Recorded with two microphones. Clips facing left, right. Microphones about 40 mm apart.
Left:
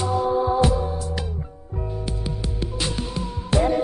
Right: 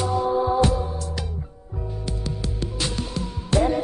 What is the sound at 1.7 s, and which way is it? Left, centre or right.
Music, centre.